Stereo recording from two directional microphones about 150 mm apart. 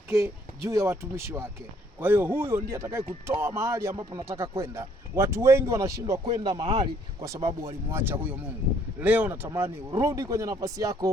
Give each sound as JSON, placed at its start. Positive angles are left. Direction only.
{"t": 0.1, "sound": "speech", "side_deg": -20}
{"t": 6.2, "sound": "speech", "side_deg": -30}